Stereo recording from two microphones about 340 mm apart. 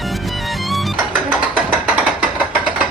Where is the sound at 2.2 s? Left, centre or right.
Centre.